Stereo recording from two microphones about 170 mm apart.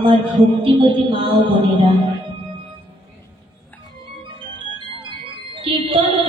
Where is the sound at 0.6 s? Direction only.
30° right (ahead or behind).